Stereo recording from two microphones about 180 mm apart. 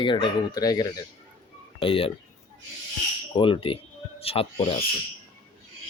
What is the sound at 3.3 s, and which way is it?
Speech, 30° left (ahead or behind).